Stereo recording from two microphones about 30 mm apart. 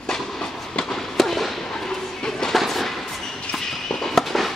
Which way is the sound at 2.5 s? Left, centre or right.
Centre.